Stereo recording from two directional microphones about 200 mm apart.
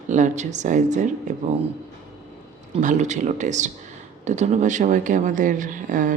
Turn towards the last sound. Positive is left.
turn(degrees=-40)  # may be behind; listen again after turning